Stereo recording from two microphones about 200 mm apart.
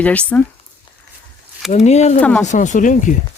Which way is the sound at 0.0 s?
5° left (ahead or behind).